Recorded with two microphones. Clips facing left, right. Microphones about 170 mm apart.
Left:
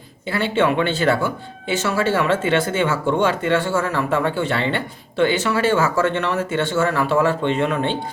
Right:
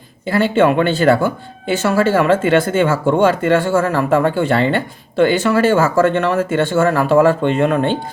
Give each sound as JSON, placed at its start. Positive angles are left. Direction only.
{"t": 0.3, "sound": "speech", "side_deg": -45}